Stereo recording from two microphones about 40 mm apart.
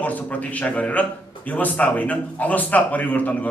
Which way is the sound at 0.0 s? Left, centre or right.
Left.